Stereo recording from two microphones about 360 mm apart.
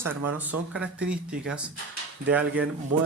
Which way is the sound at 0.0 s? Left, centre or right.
Right.